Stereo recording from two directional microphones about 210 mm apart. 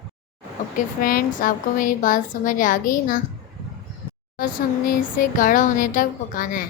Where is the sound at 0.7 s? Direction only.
45° left (ahead or behind).